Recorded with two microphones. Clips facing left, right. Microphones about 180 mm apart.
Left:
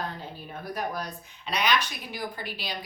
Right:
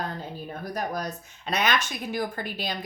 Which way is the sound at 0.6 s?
45° right (ahead or behind).